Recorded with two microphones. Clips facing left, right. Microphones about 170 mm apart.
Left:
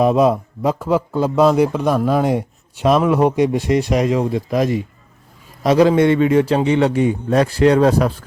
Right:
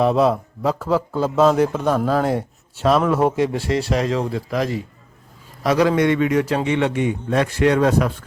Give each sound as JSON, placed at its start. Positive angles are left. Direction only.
{"t": 0.0, "sound": "a man's voice", "side_deg": 15}